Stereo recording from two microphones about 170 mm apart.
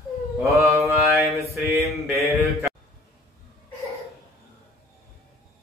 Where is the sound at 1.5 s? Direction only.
15° right (ahead or behind).